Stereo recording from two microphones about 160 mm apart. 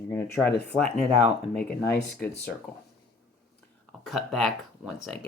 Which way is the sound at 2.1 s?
10° left (ahead or behind).